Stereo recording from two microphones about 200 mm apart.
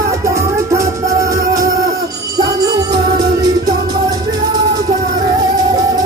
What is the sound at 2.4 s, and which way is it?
Music, 20° right (ahead or behind).